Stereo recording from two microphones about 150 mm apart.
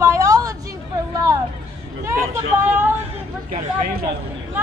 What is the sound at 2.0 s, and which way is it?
Speech, 20° right (ahead or behind).